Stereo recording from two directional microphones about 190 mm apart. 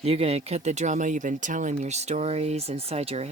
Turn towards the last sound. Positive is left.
turn(degrees=-35)  # may be behind; listen again after turning